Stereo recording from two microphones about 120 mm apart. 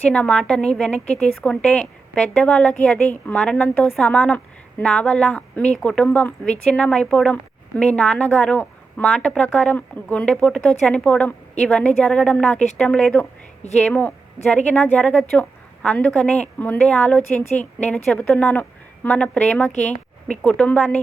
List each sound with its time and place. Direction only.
0.1 s a woman's voice: 10° left (ahead or behind)
19.9 s a sound: 75° left (ahead or behind)
20.4 s a woman's voice: 10° left (ahead or behind)